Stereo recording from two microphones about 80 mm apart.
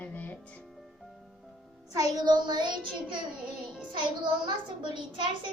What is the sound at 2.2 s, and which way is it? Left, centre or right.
Child singing, right.